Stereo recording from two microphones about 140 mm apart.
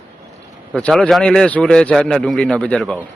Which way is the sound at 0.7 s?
5° left (ahead or behind).